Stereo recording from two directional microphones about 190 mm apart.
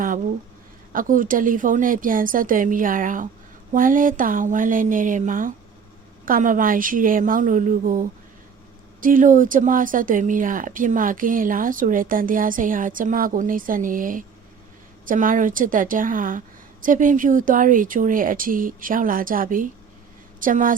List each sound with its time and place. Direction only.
0.9 s speech: 45° right (ahead or behind)